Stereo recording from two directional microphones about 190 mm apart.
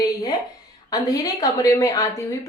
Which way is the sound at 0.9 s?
20° left (ahead or behind).